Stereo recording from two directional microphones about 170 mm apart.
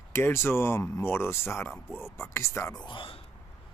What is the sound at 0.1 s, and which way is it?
Speech, 15° left (ahead or behind).